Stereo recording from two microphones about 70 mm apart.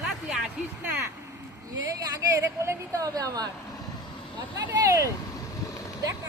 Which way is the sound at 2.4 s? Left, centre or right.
Right.